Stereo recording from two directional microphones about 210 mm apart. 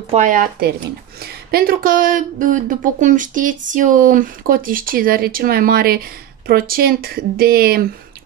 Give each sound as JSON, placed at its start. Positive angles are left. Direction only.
{"t": 0.1, "sound": "speech", "side_deg": -35}